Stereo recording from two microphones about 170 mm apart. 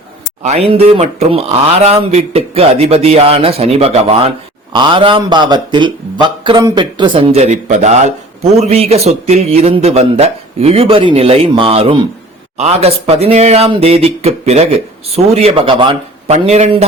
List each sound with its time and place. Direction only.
0.4 s a man's voice: 40° right (ahead or behind)